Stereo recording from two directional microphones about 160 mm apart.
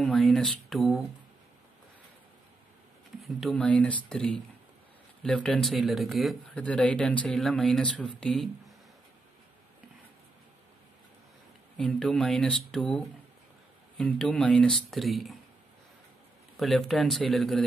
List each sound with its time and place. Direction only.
0.0 s speech: centre (ahead or behind)
3.2 s speech: centre (ahead or behind)
11.7 s speech: 5° left (ahead or behind)
16.5 s speech: centre (ahead or behind)